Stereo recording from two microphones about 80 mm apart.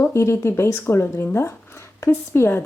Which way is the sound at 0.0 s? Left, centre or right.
Left.